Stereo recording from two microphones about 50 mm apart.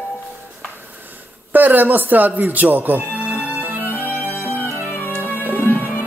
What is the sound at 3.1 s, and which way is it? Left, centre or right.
Music, right.